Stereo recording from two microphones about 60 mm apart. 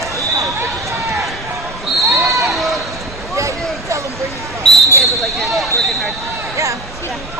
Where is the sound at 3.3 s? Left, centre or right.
Right.